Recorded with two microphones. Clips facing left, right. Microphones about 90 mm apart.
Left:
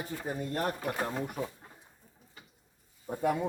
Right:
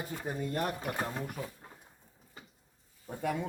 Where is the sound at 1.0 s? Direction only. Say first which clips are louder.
Left 3 dB; 20° left (ahead or behind).